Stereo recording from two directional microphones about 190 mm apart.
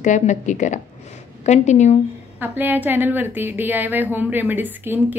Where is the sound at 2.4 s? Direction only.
10° right (ahead or behind).